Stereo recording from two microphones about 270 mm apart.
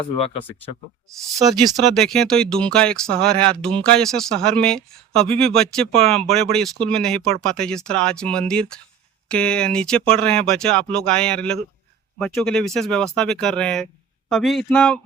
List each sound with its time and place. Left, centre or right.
0.0 s speech: left
2.0 s speech: centre